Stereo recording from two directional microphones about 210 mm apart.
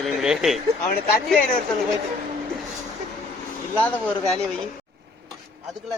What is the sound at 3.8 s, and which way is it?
Speech, 5° left (ahead or behind).